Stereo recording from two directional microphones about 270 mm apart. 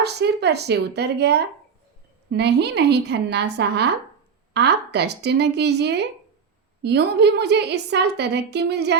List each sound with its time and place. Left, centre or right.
0.0 s a woman's voice: right